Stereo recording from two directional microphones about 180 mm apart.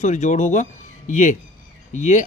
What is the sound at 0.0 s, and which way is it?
A man's voice, 40° left (ahead or behind).